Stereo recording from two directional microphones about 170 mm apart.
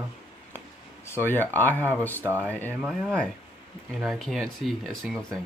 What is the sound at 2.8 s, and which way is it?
Speech, 5° left (ahead or behind).